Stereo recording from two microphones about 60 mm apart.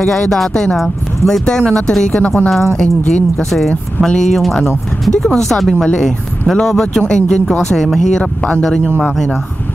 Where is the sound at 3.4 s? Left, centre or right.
Centre.